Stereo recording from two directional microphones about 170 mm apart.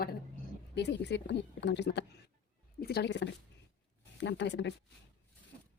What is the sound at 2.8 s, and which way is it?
Speech, 70° left (ahead or behind).